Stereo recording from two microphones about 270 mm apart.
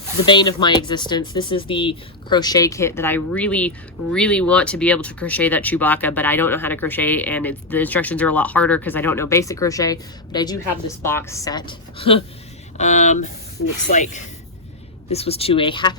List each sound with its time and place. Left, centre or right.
0.3 s speech: centre